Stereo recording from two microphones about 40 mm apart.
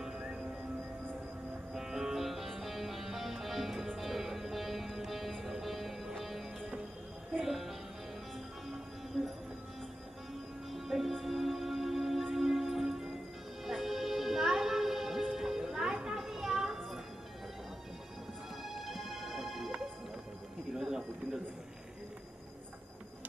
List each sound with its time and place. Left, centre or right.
0.0 s music: centre
1.7 s music: centre
10.7 s music: centre
18.6 s music: centre
20.7 s a sound: centre